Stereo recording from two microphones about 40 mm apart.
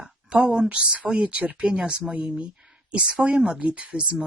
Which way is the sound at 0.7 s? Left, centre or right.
Right.